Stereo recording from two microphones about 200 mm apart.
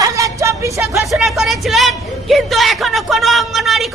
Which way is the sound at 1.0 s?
Centre (ahead or behind).